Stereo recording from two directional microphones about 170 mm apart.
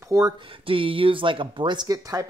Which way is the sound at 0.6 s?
30° right (ahead or behind).